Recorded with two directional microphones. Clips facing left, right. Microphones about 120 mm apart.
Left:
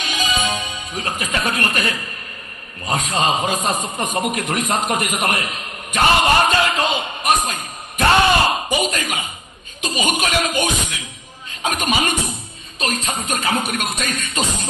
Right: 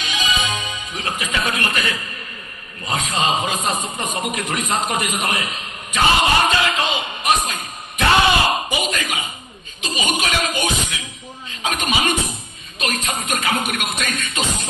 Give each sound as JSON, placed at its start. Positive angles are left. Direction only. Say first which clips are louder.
{"t": 0.0, "sound": "music", "louder": "left 1 dB", "side_deg": 45}
{"t": 2.9, "sound": "a man's voice", "louder": "left 1 dB", "side_deg": 40}